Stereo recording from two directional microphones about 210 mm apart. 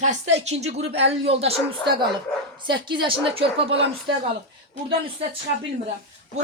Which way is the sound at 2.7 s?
20° right (ahead or behind).